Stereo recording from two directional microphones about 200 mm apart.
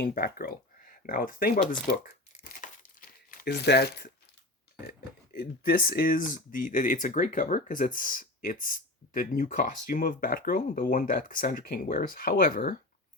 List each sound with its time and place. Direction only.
0.0 s speech: 50° left (ahead or behind)
2.4 s crumpling: 40° left (ahead or behind)
3.2 s speech: 50° left (ahead or behind)